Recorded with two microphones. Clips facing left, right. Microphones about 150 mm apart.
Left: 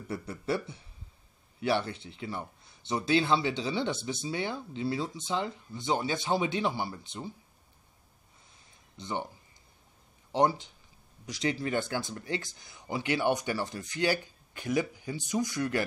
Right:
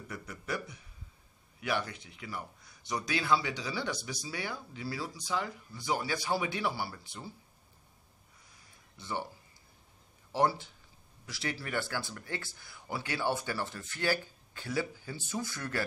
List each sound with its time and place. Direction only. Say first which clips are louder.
0.1 s speech: left 7 dB; 30° left (ahead or behind)
8.9 s speech: left 2 dB; 20° left (ahead or behind)
10.3 s speech: left 3 dB; 20° left (ahead or behind)